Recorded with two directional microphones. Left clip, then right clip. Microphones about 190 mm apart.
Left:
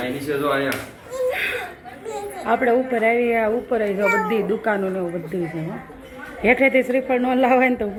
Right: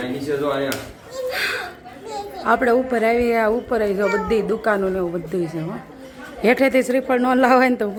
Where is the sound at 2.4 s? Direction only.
10° right (ahead or behind).